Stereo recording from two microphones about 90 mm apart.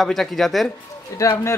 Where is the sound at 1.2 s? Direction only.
35° left (ahead or behind).